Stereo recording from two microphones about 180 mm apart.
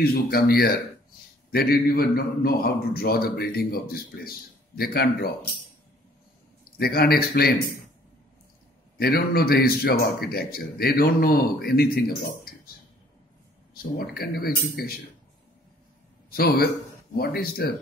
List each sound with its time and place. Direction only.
0.0 s a man's voice: 60° left (ahead or behind)
6.6 s a man's voice: 60° left (ahead or behind)
8.9 s a man's voice: 60° left (ahead or behind)
13.9 s a man's voice: 60° left (ahead or behind)
16.3 s a man's voice: 55° left (ahead or behind)